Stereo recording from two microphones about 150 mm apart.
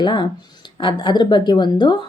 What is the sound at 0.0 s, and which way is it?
Speech, 30° left (ahead or behind).